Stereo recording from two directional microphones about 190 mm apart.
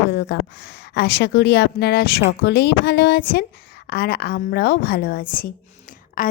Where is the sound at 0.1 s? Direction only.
65° left (ahead or behind).